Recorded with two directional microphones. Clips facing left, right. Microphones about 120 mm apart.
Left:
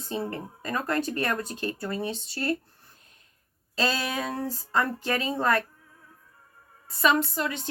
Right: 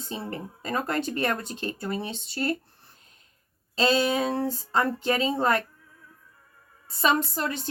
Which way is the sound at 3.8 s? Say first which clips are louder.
Right 5 dB; 25° right (ahead or behind).